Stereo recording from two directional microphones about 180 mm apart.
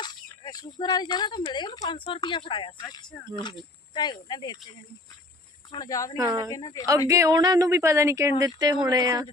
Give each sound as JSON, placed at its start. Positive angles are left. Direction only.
{"t": 0.4, "sound": "speech", "side_deg": 20}
{"t": 5.7, "sound": "speech", "side_deg": 20}
{"t": 6.1, "sound": "speech", "side_deg": -20}
{"t": 6.5, "sound": "speech", "side_deg": 20}
{"t": 7.1, "sound": "speech", "side_deg": -20}